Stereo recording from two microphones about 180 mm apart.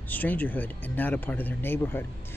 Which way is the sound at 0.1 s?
10° left (ahead or behind).